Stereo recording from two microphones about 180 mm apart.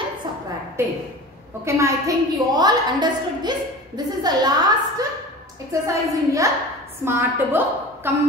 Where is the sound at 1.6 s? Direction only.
15° right (ahead or behind).